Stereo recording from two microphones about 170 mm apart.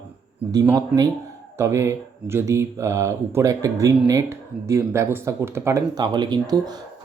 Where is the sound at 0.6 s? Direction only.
20° right (ahead or behind).